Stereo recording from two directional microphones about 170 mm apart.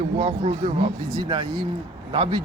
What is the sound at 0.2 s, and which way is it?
Speech, 40° right (ahead or behind).